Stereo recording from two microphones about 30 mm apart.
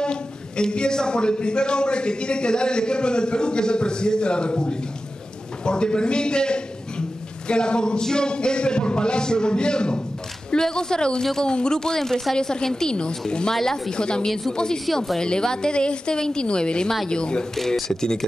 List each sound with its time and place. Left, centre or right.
0.0 s a man's voice: left
17.6 s speech: centre